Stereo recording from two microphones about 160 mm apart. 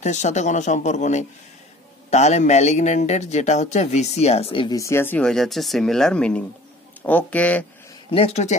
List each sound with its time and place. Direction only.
0.0 s a man's voice: 45° left (ahead or behind); by 7.6 s 10° left (ahead or behind)
8.1 s a man's voice: 40° left (ahead or behind)